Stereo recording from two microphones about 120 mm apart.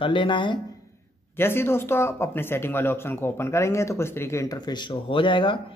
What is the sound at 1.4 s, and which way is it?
Speech, 20° left (ahead or behind).